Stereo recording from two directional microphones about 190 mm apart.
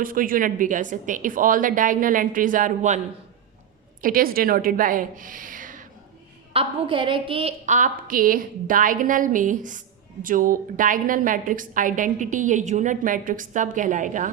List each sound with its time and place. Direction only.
0.0 s a woman's voice: 45° right (ahead or behind)
4.0 s a woman's voice: 50° right (ahead or behind)
6.5 s a woman's voice: 30° right (ahead or behind)